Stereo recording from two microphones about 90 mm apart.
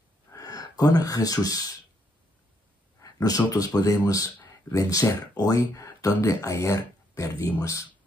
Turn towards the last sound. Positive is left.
turn(degrees=35)  # may be behind; listen again after turning